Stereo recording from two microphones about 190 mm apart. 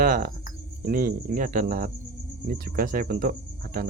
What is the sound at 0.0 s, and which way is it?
Speech, 45° right (ahead or behind).